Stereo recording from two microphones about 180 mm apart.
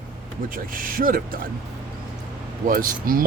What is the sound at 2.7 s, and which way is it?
Speech, 50° right (ahead or behind).